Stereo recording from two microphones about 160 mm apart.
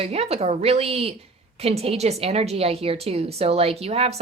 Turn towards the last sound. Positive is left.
turn(degrees=-40)  # may be behind; listen again after turning